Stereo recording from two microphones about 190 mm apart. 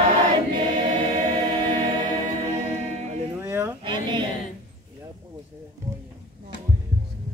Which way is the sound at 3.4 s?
10° right (ahead or behind).